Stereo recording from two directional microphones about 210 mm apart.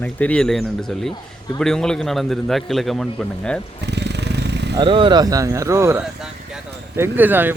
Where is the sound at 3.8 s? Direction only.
55° right (ahead or behind).